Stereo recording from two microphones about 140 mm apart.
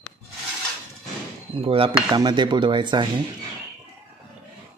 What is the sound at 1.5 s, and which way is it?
Speech, 40° right (ahead or behind).